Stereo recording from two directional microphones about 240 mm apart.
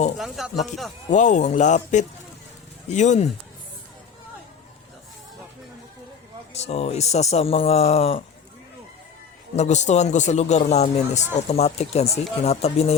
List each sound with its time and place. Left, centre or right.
0.2 s speech: centre
1.1 s a man's voice: left
6.5 s a man's voice: left
9.6 s a man's voice: left